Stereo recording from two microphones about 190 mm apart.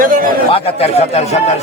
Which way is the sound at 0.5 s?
35° left (ahead or behind).